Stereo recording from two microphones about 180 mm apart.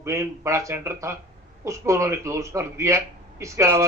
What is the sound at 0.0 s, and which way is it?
A man's voice, 15° right (ahead or behind).